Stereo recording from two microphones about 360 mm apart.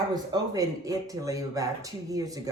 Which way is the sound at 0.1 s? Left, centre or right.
Centre.